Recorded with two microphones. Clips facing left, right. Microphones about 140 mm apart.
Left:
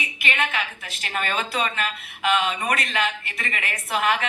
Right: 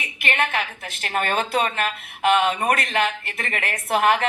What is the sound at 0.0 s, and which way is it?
A woman's voice, 50° right (ahead or behind).